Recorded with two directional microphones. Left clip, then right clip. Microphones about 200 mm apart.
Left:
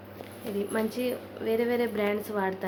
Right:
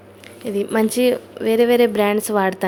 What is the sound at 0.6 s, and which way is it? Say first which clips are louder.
A woman's voice: right 12 dB; 55° right (ahead or behind).